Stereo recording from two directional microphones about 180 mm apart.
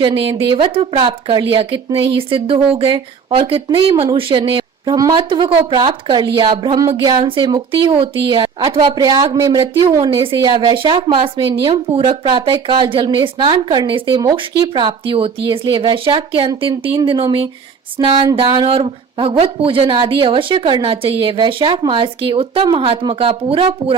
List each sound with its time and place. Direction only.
0.0 s speech: 30° right (ahead or behind)